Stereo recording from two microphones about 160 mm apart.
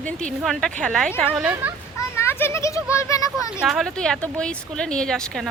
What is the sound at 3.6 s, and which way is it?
Speech, centre (ahead or behind).